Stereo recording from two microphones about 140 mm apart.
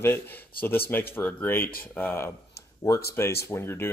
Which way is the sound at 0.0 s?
15° left (ahead or behind).